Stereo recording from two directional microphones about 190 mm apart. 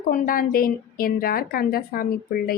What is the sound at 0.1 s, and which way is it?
A woman's voice, 45° left (ahead or behind).